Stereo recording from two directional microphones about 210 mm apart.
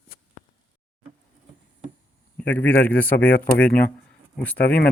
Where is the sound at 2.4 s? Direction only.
5° left (ahead or behind).